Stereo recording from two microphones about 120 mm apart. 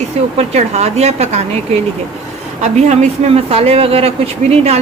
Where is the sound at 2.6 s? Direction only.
70° right (ahead or behind).